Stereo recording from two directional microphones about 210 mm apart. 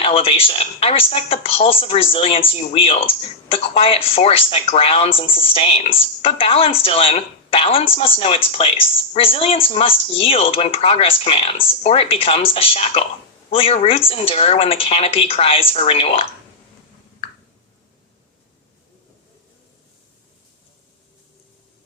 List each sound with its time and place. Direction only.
0.0 s a woman's voice: 25° left (ahead or behind)